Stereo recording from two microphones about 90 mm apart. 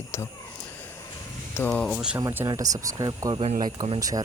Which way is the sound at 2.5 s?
40° right (ahead or behind).